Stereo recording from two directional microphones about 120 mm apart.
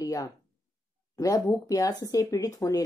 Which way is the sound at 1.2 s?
30° left (ahead or behind).